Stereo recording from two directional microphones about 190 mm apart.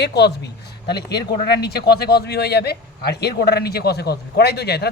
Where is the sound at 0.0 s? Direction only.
60° left (ahead or behind).